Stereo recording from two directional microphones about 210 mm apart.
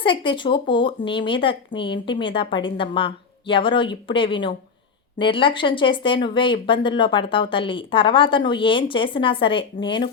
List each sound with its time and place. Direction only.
0.0 s speech: 25° left (ahead or behind)